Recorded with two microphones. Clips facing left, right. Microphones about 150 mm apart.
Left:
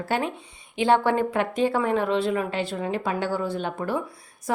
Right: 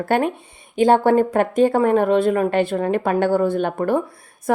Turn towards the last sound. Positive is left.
turn(degrees=-55)  # may be behind; listen again after turning